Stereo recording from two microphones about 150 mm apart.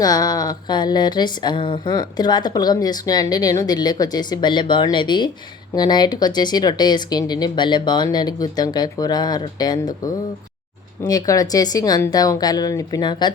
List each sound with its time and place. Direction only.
0.0 s speech: 25° left (ahead or behind)
11.0 s speech: 25° left (ahead or behind)